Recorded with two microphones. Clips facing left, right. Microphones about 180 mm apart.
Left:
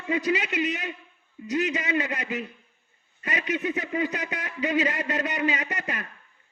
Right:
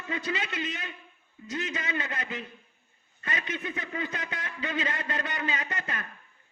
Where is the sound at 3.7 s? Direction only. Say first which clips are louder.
Left 7 dB; 20° left (ahead or behind).